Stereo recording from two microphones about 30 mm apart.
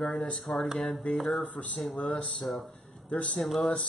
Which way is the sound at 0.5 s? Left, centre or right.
Left.